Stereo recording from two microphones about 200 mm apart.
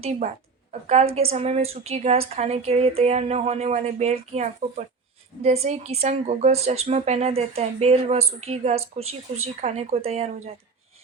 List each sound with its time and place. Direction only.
0.7 s a woman's voice: 35° right (ahead or behind)